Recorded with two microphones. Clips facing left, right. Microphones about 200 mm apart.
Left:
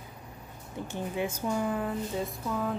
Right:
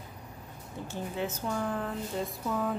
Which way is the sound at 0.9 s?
10° left (ahead or behind).